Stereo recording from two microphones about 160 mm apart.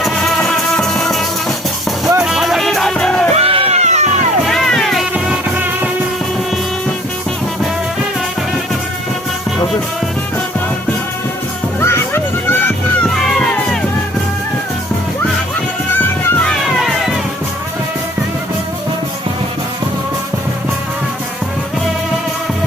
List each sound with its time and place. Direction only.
0.0 s music: centre (ahead or behind)
3.3 s a sound: 35° right (ahead or behind)
4.4 s music: centre (ahead or behind)
11.8 s music: 15° left (ahead or behind)
16.5 s music: centre (ahead or behind)